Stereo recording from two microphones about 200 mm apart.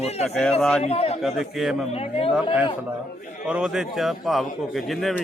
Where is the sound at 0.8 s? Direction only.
30° left (ahead or behind).